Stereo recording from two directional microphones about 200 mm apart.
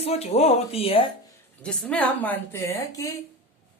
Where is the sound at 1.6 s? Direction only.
5° left (ahead or behind).